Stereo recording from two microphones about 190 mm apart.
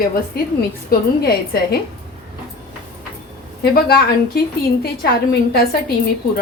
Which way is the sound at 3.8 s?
50° left (ahead or behind).